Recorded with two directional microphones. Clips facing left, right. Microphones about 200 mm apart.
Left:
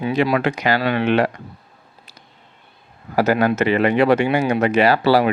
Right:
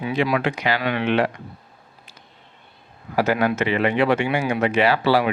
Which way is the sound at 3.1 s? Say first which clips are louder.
Left 3 dB; 40° left (ahead or behind).